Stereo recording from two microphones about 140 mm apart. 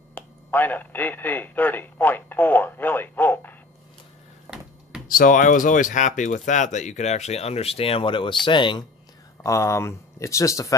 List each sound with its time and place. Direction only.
0.1 s speech: 15° left (ahead or behind)
4.5 s a sound: 20° right (ahead or behind)
5.0 s speech: 85° left; by 8.8 s 35° left (ahead or behind)
9.4 s speech: 20° left (ahead or behind)